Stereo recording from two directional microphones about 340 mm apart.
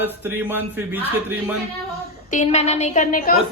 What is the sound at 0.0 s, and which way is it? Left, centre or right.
Speech, centre.